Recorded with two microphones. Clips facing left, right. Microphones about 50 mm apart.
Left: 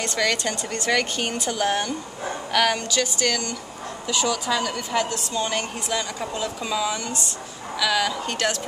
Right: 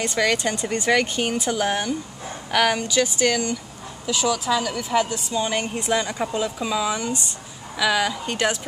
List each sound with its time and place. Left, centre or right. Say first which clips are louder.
0.0 s speech: right 2 dB; centre
4.1 s speech: right 2 dB; centre